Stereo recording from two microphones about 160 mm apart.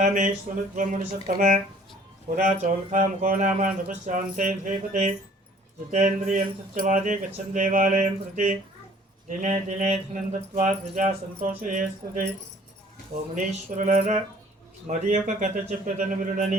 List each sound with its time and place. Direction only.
0.0 s speech: 55° right (ahead or behind)
13.3 s speech: 50° right (ahead or behind)